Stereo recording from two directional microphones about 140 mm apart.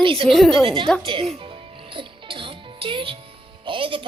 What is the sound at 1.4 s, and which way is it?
Music, 40° right (ahead or behind).